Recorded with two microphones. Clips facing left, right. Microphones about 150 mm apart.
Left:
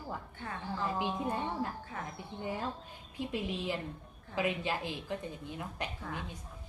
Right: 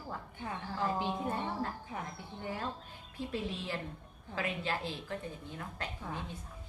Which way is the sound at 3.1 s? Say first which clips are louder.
Left 2 dB; 15° left (ahead or behind).